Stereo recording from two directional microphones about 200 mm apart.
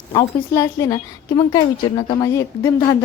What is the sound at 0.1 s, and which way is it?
A woman's voice, 20° left (ahead or behind).